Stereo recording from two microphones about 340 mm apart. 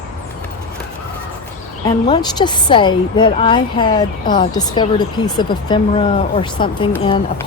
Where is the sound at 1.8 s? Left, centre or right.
Centre.